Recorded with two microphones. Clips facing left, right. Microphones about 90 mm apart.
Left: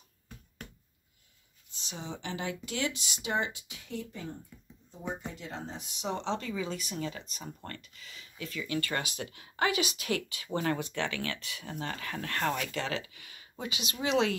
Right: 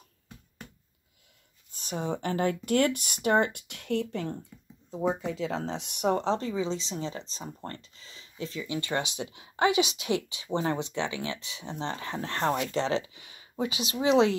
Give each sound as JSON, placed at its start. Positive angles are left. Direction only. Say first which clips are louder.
{"t": 1.7, "sound": "speech", "louder": "right 9 dB", "side_deg": -50}
{"t": 5.6, "sound": "speech", "louder": "right 9 dB", "side_deg": -85}
{"t": 6.2, "sound": "speech", "louder": "right 5 dB", "side_deg": -35}